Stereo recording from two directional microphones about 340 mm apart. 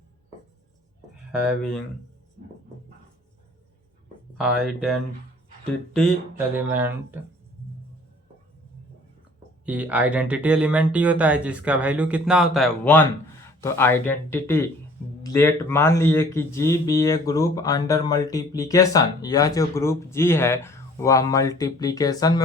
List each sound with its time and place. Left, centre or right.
1.3 s speech: centre
4.4 s speech: centre
6.6 s speech: centre
9.6 s speech: centre